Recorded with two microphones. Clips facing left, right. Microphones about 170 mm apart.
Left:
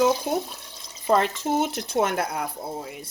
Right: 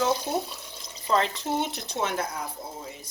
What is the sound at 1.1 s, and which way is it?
A woman's voice, 50° left (ahead or behind).